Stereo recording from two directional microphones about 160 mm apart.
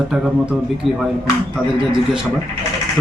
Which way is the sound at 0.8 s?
35° right (ahead or behind).